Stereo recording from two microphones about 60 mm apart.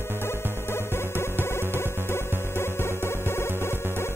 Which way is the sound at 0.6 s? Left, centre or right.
Left.